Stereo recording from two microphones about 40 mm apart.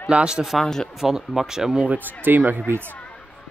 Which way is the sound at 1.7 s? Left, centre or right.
Right.